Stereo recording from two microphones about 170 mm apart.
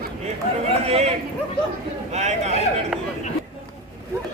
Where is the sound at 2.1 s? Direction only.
40° right (ahead or behind).